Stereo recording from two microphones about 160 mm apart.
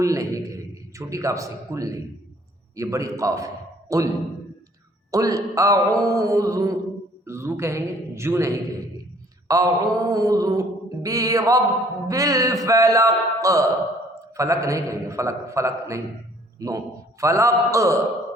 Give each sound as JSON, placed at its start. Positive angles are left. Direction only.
{"t": 0.0, "sound": "a man's voice", "side_deg": -20}
{"t": 2.7, "sound": "mantra", "side_deg": -20}
{"t": 3.2, "sound": "a man's voice", "side_deg": -20}
{"t": 5.1, "sound": "mantra", "side_deg": -20}
{"t": 7.3, "sound": "a man's voice", "side_deg": -15}
{"t": 9.5, "sound": "mantra", "side_deg": -20}